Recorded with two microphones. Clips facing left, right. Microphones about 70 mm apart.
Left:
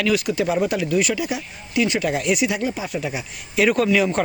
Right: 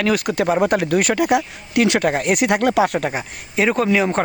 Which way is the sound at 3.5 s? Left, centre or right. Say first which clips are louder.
Even; right.